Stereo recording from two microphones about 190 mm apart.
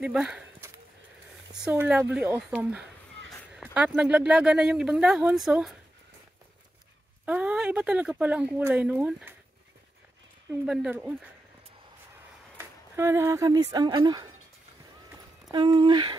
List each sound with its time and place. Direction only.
0.0 s speech: 5° right (ahead or behind)
1.5 s speech: 5° right (ahead or behind)
7.2 s speech: 5° right (ahead or behind)
10.6 s speech: 5° right (ahead or behind)
12.5 s speech: 15° right (ahead or behind)
15.5 s speech: 25° right (ahead or behind)